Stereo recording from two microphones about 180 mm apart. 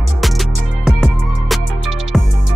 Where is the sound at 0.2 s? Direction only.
Centre (ahead or behind).